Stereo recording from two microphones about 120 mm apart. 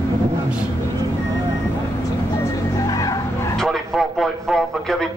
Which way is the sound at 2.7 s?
30° left (ahead or behind).